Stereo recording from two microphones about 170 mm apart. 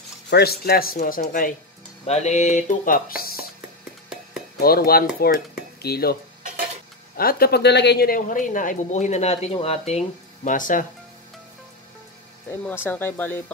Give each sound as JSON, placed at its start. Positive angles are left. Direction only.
{"t": 0.3, "sound": "speech", "side_deg": 70}
{"t": 2.0, "sound": "speech", "side_deg": 40}
{"t": 4.1, "sound": "a sound", "side_deg": -5}
{"t": 4.6, "sound": "speech", "side_deg": 60}
{"t": 7.2, "sound": "a woman's voice", "side_deg": 60}
{"t": 12.6, "sound": "speech", "side_deg": 10}